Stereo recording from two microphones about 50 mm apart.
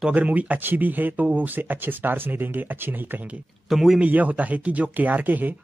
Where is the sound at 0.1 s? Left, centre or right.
Right.